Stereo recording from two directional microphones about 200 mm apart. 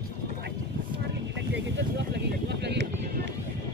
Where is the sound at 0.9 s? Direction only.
60° right (ahead or behind).